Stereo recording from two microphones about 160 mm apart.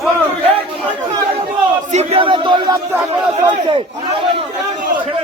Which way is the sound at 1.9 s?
40° right (ahead or behind).